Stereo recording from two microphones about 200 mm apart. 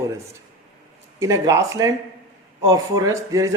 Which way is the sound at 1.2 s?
15° right (ahead or behind).